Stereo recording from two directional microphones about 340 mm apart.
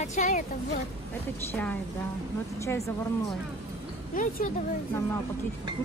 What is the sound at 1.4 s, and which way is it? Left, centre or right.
Speech, centre.